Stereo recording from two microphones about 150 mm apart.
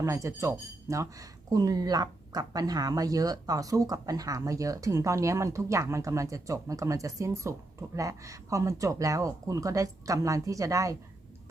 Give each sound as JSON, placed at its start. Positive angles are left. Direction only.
{"t": 0.0, "sound": "speech", "side_deg": -20}